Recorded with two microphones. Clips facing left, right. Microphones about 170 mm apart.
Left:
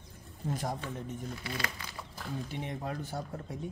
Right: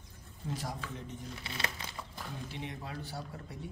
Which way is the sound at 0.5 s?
50° left (ahead or behind).